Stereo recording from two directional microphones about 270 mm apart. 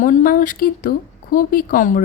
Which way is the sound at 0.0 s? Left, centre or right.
Left.